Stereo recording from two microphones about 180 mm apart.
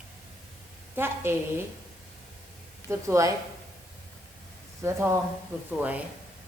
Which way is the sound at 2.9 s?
15° right (ahead or behind).